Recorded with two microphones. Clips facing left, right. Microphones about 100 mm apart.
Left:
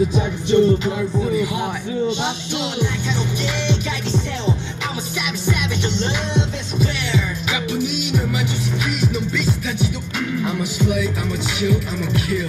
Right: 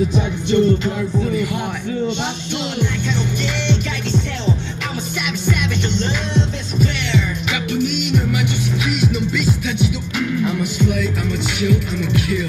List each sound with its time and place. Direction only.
0.5 s music: 20° left (ahead or behind)
3.5 s music: 5° left (ahead or behind)